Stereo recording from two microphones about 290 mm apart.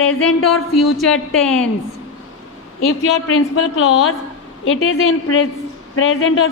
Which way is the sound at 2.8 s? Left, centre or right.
Left.